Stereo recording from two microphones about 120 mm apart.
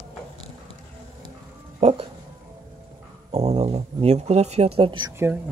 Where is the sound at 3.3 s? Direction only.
60° right (ahead or behind); by 5.1 s 45° right (ahead or behind).